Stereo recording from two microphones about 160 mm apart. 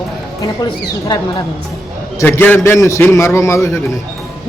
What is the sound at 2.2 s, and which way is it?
A man's voice, 15° left (ahead or behind).